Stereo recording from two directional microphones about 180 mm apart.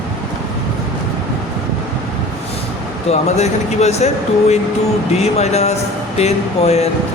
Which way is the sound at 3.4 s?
35° left (ahead or behind).